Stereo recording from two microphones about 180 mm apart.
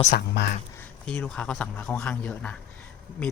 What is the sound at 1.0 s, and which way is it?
Speech, 5° left (ahead or behind).